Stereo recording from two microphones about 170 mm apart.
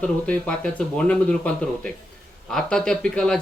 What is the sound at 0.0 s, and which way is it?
Speech, 5° left (ahead or behind).